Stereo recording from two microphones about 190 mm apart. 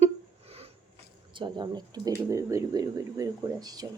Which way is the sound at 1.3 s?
25° right (ahead or behind).